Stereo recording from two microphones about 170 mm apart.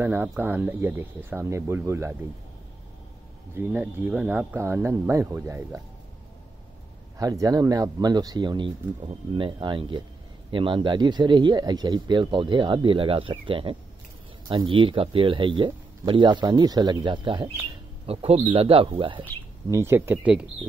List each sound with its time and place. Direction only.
0.0 s speech: 10° right (ahead or behind)
3.5 s speech: 10° right (ahead or behind)
7.2 s a man's voice: 20° right (ahead or behind)
19.7 s speech: 15° right (ahead or behind)